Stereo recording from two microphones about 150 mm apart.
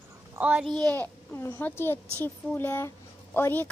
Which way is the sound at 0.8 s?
10° left (ahead or behind).